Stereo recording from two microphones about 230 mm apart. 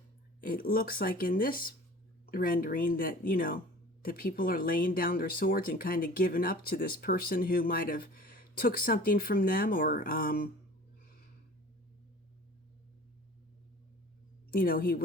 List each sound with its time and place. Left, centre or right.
0.4 s speech: left
14.5 s speech: left